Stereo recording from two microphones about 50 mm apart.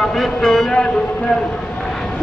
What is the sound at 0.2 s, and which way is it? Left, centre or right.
Music, centre.